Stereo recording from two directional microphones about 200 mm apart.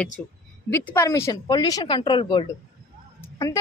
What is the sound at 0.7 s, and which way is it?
A woman's voice, 15° left (ahead or behind).